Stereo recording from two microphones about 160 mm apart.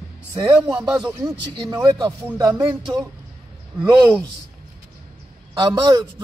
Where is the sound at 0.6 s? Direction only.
5° right (ahead or behind).